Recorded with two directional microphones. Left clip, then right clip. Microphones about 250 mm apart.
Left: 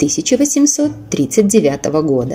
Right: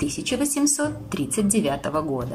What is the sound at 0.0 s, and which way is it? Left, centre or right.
A woman's voice, centre.